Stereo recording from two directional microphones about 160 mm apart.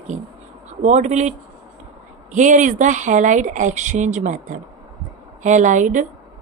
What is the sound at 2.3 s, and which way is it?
A woman's voice, 50° right (ahead or behind).